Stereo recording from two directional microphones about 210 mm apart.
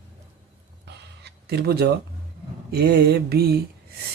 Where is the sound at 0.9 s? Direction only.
50° right (ahead or behind).